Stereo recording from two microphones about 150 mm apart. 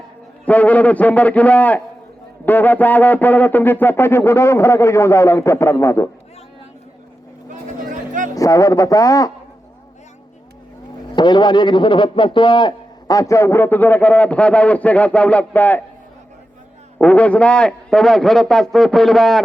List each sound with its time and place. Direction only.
0.4 s a man's voice: 10° left (ahead or behind)
7.5 s a sound: 60° right (ahead or behind)
8.4 s speech: 20° left (ahead or behind)
11.1 s a man's voice: 30° left (ahead or behind); by 15.8 s 10° left (ahead or behind)
17.0 s a man's voice: 10° left (ahead or behind)